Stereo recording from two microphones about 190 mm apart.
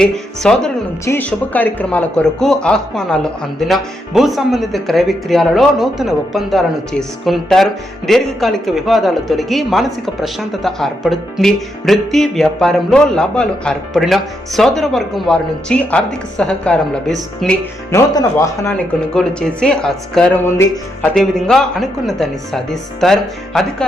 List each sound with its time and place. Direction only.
0.0 s speech: 5° left (ahead or behind)
17.9 s a man's voice: 20° left (ahead or behind)
18.9 s speech: 5° left (ahead or behind)